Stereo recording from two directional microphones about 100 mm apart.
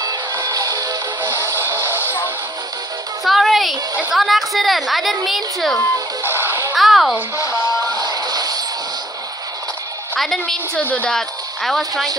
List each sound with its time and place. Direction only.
0.0 s music: 45° right (ahead or behind); by 2.1 s 25° right (ahead or behind)
3.3 s a sound: centre (ahead or behind)
4.1 s a woman's voice: centre (ahead or behind)
6.2 s music: 20° right (ahead or behind)
6.7 s a sound: centre (ahead or behind)
7.4 s music: 40° right (ahead or behind)
10.1 s a woman's voice: centre (ahead or behind)
10.4 s a woman's voice: 15° left (ahead or behind)
11.1 s speech: 5° left (ahead or behind)